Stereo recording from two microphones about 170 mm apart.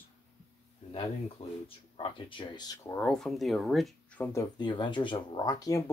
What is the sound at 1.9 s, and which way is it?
Speech, 30° left (ahead or behind).